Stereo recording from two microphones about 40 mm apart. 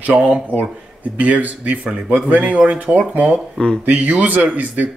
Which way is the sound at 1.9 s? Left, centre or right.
Right.